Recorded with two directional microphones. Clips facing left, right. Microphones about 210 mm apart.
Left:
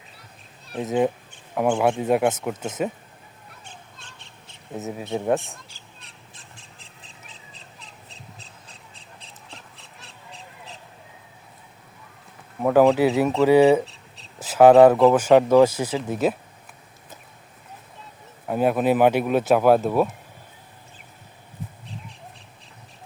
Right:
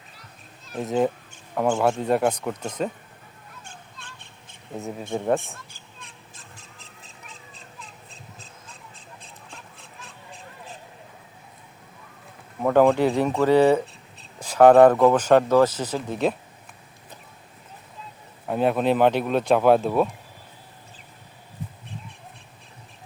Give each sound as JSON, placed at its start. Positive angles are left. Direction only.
{"t": 0.8, "sound": "speech", "side_deg": 0}
{"t": 3.6, "sound": "crow", "side_deg": -50}
{"t": 4.8, "sound": "speech", "side_deg": 5}
{"t": 5.7, "sound": "a sound", "side_deg": -50}
{"t": 8.1, "sound": "a sound", "side_deg": -50}
{"t": 12.6, "sound": "speech", "side_deg": 5}
{"t": 18.4, "sound": "speech", "side_deg": 5}